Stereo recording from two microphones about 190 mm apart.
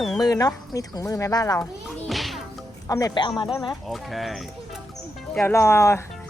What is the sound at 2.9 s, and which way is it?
Speech, 20° left (ahead or behind).